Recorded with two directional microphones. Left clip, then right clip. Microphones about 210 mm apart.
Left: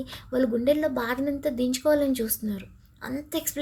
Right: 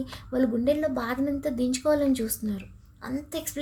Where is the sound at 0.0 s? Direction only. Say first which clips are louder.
Left 1 dB; 10° left (ahead or behind).